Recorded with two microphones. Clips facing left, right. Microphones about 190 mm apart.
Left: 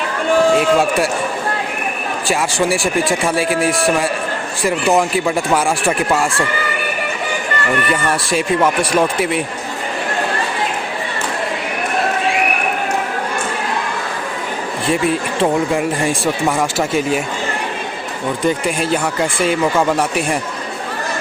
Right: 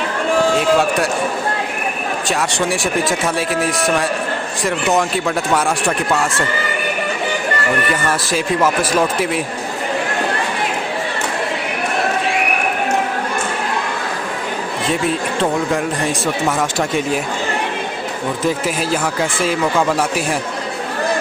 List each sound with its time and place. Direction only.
0.3 s run: centre (ahead or behind)
2.2 s a man's voice: centre (ahead or behind)
8.3 s a man's voice: centre (ahead or behind)
14.8 s a man's voice: centre (ahead or behind)
18.4 s a man's voice: centre (ahead or behind)